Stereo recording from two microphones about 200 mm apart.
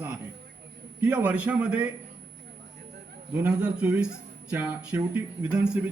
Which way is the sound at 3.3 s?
5° right (ahead or behind).